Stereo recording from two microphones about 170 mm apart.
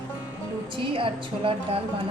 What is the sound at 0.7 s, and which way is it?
A woman's voice, 30° right (ahead or behind).